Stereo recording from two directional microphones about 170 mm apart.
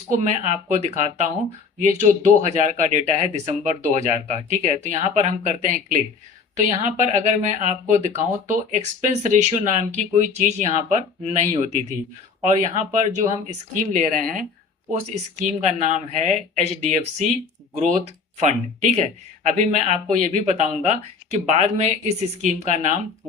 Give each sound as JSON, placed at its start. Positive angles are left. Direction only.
{"t": 0.1, "sound": "speech", "side_deg": -45}
{"t": 15.0, "sound": "speech", "side_deg": -45}